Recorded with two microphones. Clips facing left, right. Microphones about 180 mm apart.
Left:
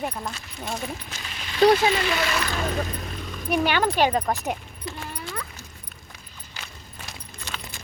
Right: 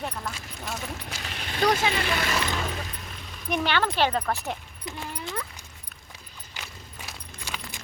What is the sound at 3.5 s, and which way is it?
Speech, 10° left (ahead or behind).